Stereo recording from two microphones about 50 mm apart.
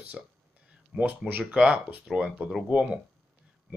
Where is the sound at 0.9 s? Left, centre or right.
Right.